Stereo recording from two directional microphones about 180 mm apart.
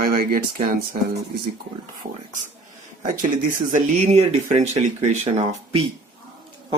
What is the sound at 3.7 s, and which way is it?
Speech, 40° right (ahead or behind).